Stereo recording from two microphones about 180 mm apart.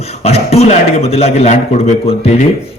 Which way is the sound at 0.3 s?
35° left (ahead or behind).